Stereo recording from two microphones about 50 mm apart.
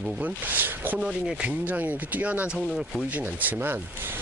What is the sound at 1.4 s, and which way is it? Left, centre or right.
Speech, right.